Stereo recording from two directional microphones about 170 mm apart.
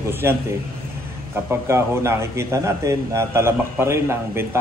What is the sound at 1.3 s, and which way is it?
A man's voice, 15° right (ahead or behind).